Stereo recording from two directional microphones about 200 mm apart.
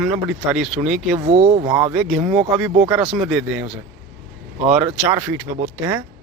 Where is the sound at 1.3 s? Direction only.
25° right (ahead or behind).